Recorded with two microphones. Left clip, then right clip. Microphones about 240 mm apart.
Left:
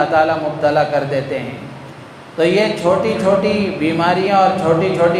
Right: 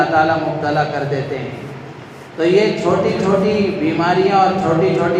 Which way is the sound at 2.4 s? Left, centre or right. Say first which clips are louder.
Even; left.